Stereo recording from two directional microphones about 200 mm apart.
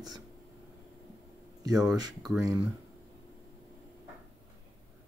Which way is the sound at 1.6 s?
20° right (ahead or behind).